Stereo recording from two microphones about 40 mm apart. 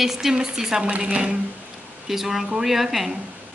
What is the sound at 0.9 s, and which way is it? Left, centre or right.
Speech, right.